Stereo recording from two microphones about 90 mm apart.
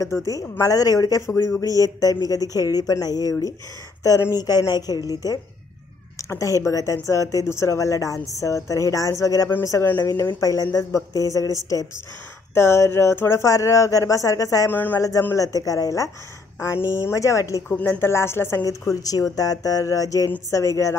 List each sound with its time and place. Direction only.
0.0 s speech: 35° left (ahead or behind)
10.2 s speech: 40° left (ahead or behind)
14.7 s speech: 20° left (ahead or behind)
15.0 s speech: 35° left (ahead or behind)
17.6 s speech: 25° left (ahead or behind)
18.6 s speech: 40° left (ahead or behind)